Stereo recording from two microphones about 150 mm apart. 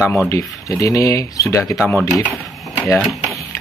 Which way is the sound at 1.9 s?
5° left (ahead or behind).